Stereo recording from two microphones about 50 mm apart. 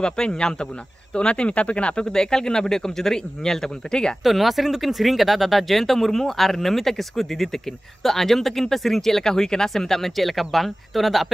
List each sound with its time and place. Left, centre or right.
0.0 s a man's voice: centre
2.0 s a man's voice: centre
4.2 s speech: centre